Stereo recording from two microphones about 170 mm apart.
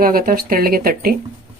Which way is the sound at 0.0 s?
60° right (ahead or behind).